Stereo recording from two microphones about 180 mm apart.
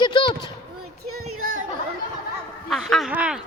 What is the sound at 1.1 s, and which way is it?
Speech, 50° right (ahead or behind).